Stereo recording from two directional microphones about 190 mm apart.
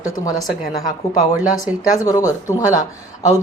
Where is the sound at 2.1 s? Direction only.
20° left (ahead or behind).